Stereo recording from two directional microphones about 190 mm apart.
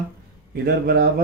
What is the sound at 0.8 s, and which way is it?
Speech, 55° right (ahead or behind).